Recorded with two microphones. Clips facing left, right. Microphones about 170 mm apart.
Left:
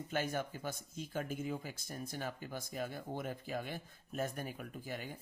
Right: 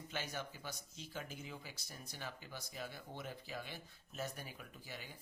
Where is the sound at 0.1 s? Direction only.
50° left (ahead or behind).